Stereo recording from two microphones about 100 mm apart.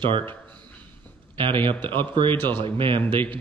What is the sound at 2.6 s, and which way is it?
Speech, 60° right (ahead or behind).